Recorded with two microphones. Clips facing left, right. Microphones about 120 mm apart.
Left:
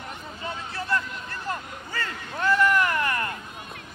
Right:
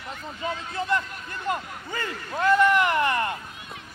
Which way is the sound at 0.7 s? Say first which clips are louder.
Right 1 dB; 20° right (ahead or behind).